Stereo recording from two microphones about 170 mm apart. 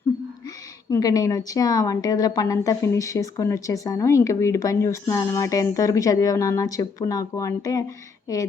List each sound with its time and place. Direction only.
0.9 s a woman's voice: 20° left (ahead or behind)